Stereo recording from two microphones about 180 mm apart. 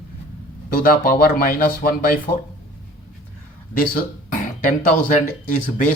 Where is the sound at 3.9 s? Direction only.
50° left (ahead or behind).